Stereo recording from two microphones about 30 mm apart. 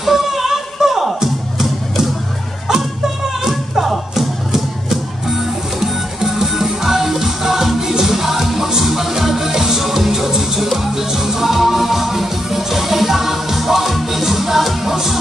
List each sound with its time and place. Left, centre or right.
0.0 s singing: centre
3.4 s music: centre